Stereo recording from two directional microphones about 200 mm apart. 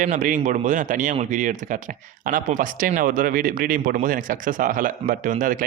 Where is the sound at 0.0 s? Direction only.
40° right (ahead or behind).